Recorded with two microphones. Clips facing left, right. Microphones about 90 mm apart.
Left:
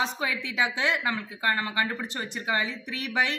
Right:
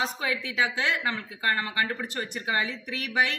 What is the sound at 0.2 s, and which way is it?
Speech, 25° left (ahead or behind).